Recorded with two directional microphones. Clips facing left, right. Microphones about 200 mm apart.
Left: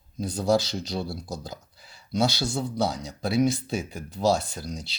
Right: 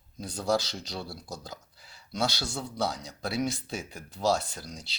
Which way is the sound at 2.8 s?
20° left (ahead or behind).